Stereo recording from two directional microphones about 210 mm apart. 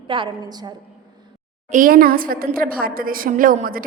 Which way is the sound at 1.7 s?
40° right (ahead or behind).